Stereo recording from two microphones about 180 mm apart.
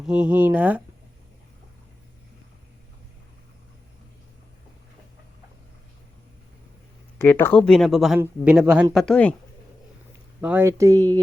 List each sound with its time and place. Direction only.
0.0 s speech: 5° right (ahead or behind)
7.2 s speech: 10° left (ahead or behind)
10.4 s speech: 10° right (ahead or behind)